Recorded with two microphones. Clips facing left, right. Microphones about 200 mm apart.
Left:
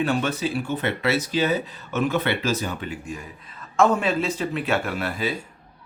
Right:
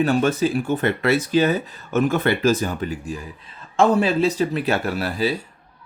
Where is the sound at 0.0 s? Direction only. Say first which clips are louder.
Right 5 dB; 40° right (ahead or behind).